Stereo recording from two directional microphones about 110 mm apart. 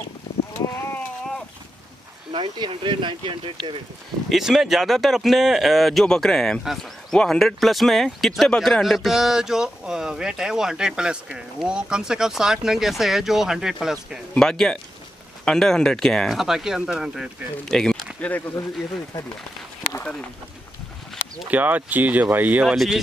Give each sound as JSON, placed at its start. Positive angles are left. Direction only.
{"t": 0.7, "sound": "sheep", "side_deg": 20}
{"t": 2.3, "sound": "speech", "side_deg": -50}
{"t": 4.3, "sound": "speech", "side_deg": -5}
{"t": 18.2, "sound": "speech", "side_deg": 15}
{"t": 20.0, "sound": "speech", "side_deg": 10}
{"t": 21.5, "sound": "speech", "side_deg": -15}